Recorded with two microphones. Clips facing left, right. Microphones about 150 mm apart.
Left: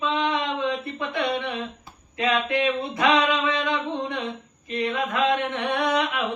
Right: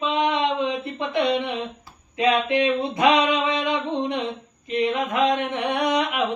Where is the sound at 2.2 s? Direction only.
20° right (ahead or behind).